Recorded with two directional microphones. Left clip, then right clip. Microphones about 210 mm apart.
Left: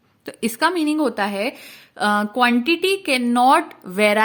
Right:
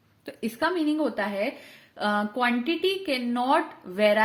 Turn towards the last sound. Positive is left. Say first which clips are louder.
# left 5 dB
turn(degrees=45)  # may be behind; listen again after turning